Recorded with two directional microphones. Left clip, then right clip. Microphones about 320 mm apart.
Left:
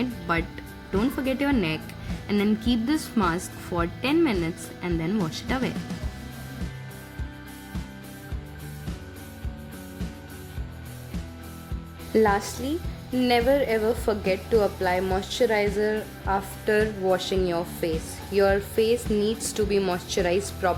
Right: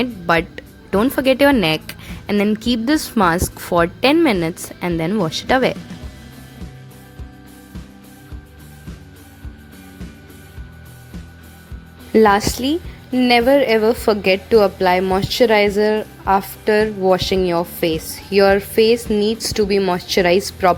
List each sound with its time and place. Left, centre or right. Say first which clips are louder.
0.0 s a woman's voice: right 10 dB; right
12.1 s a woman's voice: right 9 dB; right